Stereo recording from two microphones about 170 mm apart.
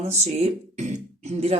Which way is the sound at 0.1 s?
40° right (ahead or behind).